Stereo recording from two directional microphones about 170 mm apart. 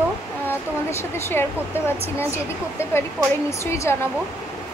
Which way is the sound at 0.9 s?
15° left (ahead or behind).